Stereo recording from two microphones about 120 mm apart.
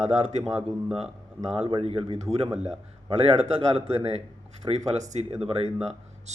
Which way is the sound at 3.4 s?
55° right (ahead or behind).